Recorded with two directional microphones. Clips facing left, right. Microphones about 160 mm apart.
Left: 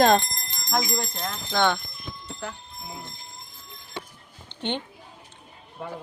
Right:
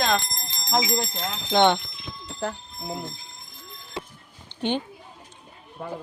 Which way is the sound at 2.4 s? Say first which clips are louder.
Right 8 dB; 45° right (ahead or behind).